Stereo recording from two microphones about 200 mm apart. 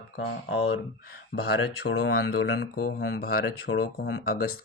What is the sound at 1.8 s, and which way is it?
Speech, 55° left (ahead or behind).